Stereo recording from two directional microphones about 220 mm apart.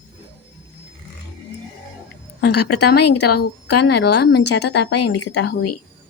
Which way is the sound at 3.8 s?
50° left (ahead or behind).